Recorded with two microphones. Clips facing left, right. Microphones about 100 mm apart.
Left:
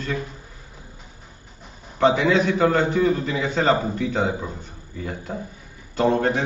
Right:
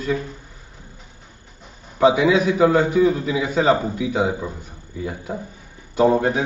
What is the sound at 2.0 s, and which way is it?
A man's voice, 10° right (ahead or behind).